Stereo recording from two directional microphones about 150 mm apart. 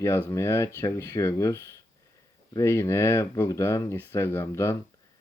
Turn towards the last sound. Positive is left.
turn(degrees=15)  # may be behind; listen again after turning